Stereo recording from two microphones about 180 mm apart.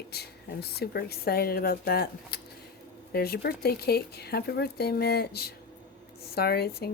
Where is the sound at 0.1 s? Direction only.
60° left (ahead or behind).